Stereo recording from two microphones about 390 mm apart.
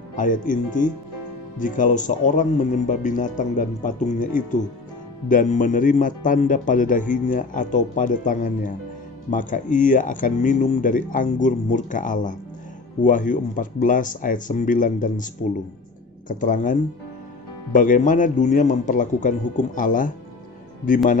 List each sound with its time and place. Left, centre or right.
0.1 s speech: centre
17.7 s speech: centre